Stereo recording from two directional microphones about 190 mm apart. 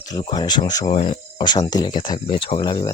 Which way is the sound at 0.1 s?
20° left (ahead or behind).